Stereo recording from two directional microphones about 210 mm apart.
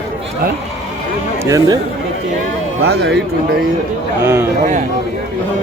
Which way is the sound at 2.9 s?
50° right (ahead or behind).